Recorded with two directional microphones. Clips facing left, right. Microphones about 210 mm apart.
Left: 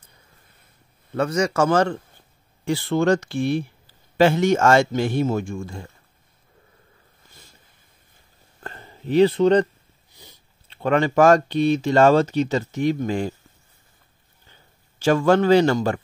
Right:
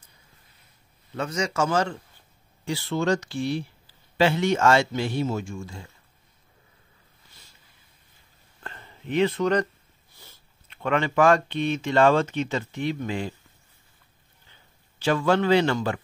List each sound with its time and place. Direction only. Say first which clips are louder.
1.1 s speech: left 6 dB; 60° left (ahead or behind)
8.6 s a sound: left 6 dB; 40° left (ahead or behind)
10.1 s biting: left 4 dB; 15° left (ahead or behind)
10.7 s speech: left 5 dB; 40° left (ahead or behind)
15.0 s speech: left 5 dB; 45° left (ahead or behind)